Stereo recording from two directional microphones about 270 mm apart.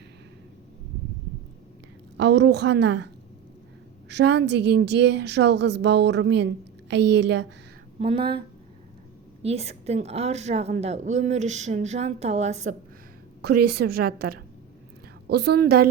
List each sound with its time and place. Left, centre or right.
2.1 s a woman's voice: right
4.1 s a woman's voice: right
7.9 s a woman's voice: right
9.4 s a woman's voice: right
13.4 s a woman's voice: right